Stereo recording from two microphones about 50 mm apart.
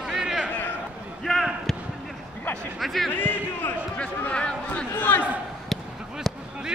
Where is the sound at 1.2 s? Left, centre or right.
Centre.